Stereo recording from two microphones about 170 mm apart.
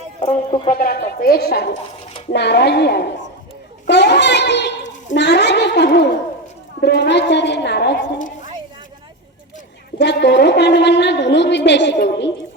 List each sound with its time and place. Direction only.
0.2 s speech: 45° left (ahead or behind)
0.7 s a woman's voice: 60° left (ahead or behind)
2.3 s a woman's voice: 85° left
3.8 s a sound: 90° left
6.8 s a woman's voice: 85° left
10.0 s a woman's voice: 90° left